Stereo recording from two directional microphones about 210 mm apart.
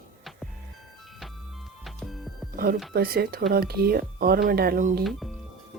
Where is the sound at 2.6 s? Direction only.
45° right (ahead or behind).